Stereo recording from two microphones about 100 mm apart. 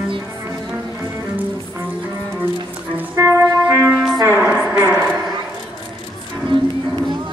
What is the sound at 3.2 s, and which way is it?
Music, 30° right (ahead or behind).